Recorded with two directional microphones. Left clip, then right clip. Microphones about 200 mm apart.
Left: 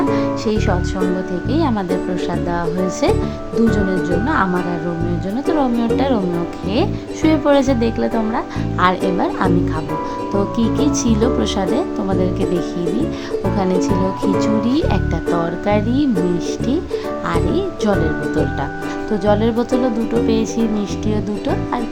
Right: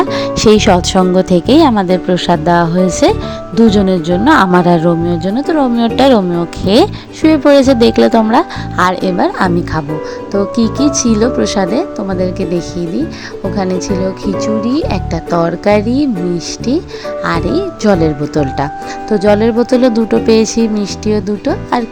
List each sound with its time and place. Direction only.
0.1 s speech: 40° right (ahead or behind)
5.5 s speech: 25° right (ahead or behind)
7.2 s speech: 25° right (ahead or behind)
10.9 s speech: 25° right (ahead or behind)
15.3 s speech: 25° right (ahead or behind)
17.2 s speech: 25° right (ahead or behind)